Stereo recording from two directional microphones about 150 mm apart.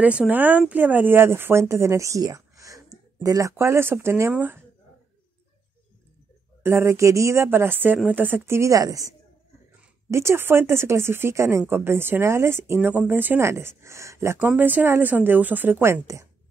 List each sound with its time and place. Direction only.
0.0 s speech: 10° right (ahead or behind)
6.6 s speech: 15° right (ahead or behind)
10.1 s speech: 15° right (ahead or behind)